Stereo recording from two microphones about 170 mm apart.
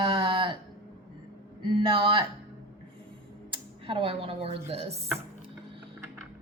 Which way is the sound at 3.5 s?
30° right (ahead or behind).